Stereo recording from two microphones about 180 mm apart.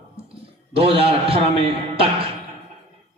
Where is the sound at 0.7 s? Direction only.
35° right (ahead or behind).